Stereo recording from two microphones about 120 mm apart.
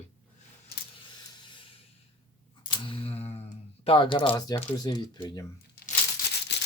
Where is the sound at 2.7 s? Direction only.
45° left (ahead or behind).